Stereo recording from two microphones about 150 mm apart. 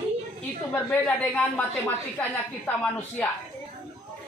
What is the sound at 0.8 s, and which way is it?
A woman's voice, 5° left (ahead or behind).